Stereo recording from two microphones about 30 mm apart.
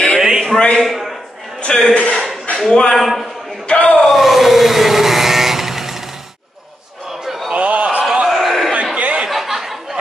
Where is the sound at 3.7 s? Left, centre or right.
Left.